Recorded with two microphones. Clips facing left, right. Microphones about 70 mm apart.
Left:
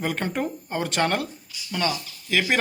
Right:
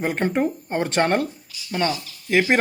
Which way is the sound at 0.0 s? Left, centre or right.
Right.